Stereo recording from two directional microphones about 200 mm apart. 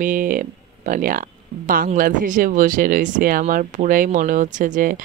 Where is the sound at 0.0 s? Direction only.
40° right (ahead or behind).